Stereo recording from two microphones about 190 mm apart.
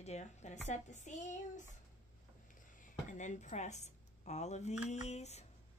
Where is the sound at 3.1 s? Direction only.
40° left (ahead or behind).